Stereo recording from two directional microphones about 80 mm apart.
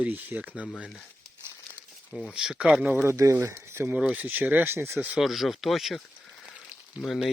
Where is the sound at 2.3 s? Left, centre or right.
Centre.